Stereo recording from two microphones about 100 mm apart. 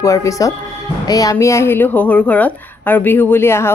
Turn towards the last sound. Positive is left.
turn(degrees=25)  # may be behind; listen again after turning